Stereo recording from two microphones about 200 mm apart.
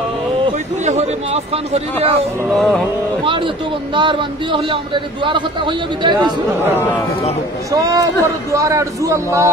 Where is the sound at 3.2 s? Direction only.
25° right (ahead or behind).